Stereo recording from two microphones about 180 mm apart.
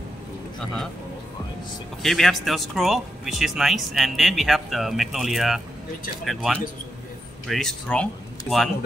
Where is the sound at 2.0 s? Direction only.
Centre (ahead or behind).